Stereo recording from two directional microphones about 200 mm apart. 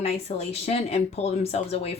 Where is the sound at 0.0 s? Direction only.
30° left (ahead or behind).